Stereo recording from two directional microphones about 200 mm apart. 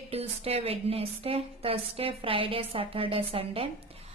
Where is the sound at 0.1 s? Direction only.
30° right (ahead or behind).